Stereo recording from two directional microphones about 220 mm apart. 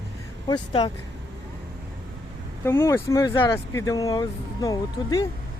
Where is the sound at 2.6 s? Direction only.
10° left (ahead or behind).